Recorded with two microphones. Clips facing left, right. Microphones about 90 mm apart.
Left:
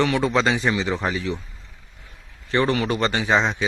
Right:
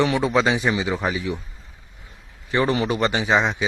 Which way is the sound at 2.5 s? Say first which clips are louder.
Even; 15° right (ahead or behind).